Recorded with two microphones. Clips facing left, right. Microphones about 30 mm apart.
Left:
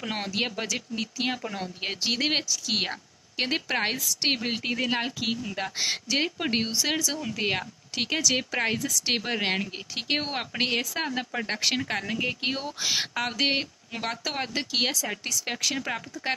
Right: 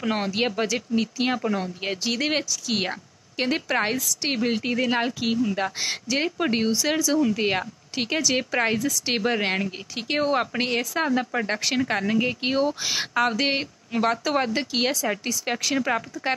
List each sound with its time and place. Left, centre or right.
0.0 s speech: centre
1.6 s a woman's voice: centre
9.9 s a woman's voice: centre
10.3 s a woman's voice: centre